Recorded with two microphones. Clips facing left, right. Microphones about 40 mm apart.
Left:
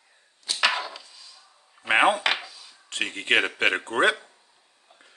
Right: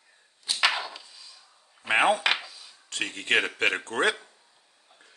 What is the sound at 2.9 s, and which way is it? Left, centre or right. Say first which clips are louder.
Speech: left 2 dB; left.